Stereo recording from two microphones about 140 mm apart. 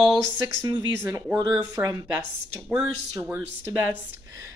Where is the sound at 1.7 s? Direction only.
25° right (ahead or behind).